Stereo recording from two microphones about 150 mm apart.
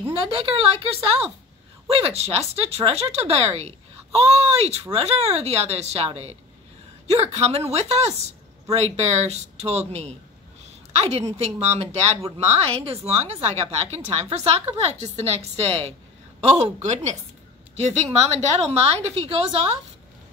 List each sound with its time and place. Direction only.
0.0 s speech: 40° right (ahead or behind)
16.3 s speech: 50° right (ahead or behind)